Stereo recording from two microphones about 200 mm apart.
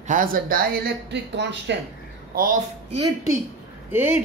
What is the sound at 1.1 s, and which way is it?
Speech, 60° right (ahead or behind).